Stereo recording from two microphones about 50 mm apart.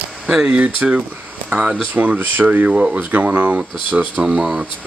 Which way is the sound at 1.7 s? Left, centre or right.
Right.